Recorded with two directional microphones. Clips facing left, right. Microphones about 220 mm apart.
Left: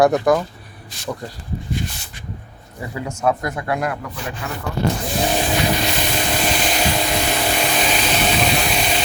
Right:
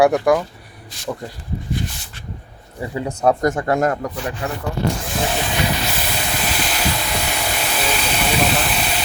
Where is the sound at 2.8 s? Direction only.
30° right (ahead or behind).